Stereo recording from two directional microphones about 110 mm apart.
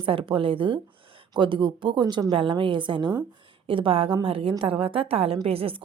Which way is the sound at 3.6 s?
55° right (ahead or behind).